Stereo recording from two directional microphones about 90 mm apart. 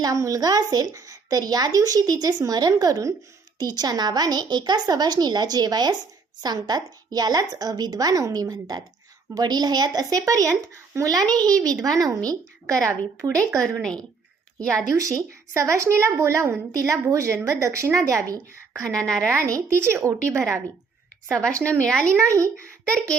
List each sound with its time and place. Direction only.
0.0 s a woman's voice: 40° right (ahead or behind)
11.1 s a woman's voice: 45° right (ahead or behind)
14.6 s speech: 10° left (ahead or behind)
14.9 s a woman's voice: 40° right (ahead or behind)
21.7 s speech: 10° left (ahead or behind)
22.1 s a woman's voice: 35° right (ahead or behind)
22.9 s speech: 10° left (ahead or behind)